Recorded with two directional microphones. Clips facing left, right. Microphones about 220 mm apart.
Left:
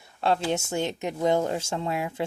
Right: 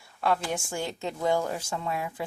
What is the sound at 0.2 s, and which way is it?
Speech, 25° left (ahead or behind).